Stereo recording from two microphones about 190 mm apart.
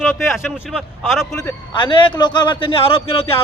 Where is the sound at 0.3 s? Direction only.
Centre (ahead or behind).